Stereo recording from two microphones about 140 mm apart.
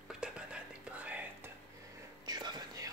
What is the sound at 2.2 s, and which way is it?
Whispering, 30° right (ahead or behind).